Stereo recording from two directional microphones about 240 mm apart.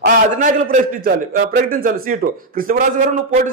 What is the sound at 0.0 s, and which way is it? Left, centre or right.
A man's voice, right.